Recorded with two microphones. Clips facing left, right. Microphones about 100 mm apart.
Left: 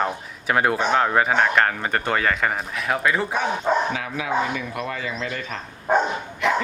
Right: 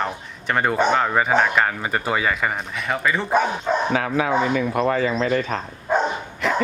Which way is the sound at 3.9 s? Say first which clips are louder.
Right 5 dB; 45° right (ahead or behind).